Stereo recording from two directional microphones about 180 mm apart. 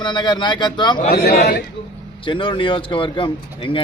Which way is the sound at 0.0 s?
25° left (ahead or behind).